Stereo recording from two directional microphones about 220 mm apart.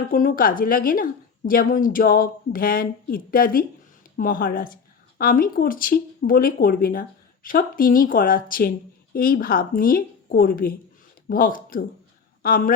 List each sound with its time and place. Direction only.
0.1 s speech: 40° left (ahead or behind)